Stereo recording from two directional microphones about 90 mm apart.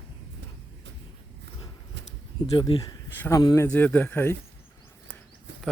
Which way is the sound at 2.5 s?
60° left (ahead or behind).